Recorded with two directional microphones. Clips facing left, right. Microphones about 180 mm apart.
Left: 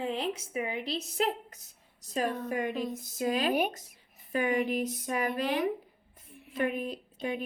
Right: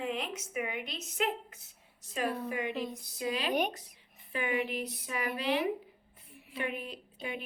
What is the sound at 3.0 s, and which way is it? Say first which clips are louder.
A woman's voice: left 8 dB; 45° left (ahead or behind).